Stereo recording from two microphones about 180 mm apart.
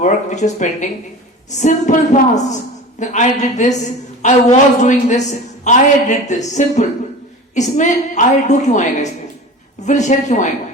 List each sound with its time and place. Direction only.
0.0 s a woman's voice: 40° left (ahead or behind)